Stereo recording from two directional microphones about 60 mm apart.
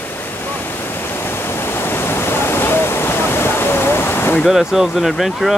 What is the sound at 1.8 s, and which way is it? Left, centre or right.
Waterfall, left.